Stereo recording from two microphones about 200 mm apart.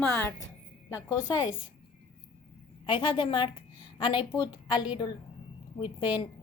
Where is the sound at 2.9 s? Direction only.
25° left (ahead or behind).